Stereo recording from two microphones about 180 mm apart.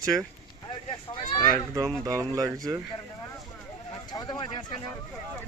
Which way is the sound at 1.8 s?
20° right (ahead or behind).